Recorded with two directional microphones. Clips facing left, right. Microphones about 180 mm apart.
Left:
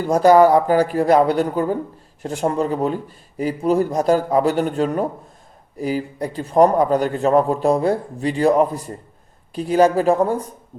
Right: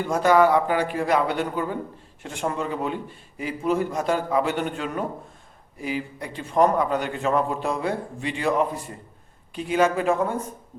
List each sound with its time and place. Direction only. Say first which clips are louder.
0.0 s a man's voice: left 6 dB; 40° left (ahead or behind)